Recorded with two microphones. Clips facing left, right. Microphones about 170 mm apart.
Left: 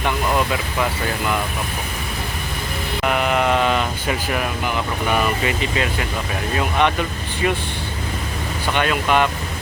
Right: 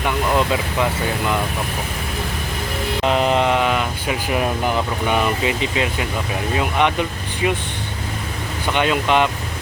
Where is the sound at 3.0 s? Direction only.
30° right (ahead or behind).